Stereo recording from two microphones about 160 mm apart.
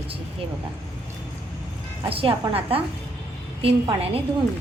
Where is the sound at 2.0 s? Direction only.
35° right (ahead or behind).